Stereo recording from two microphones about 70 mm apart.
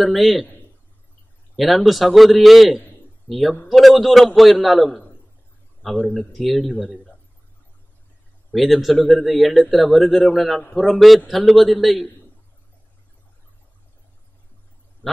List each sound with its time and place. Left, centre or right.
0.0 s speech: centre
1.6 s a man's voice: centre
5.8 s a sound: centre
6.1 s speech: centre
8.5 s speech: centre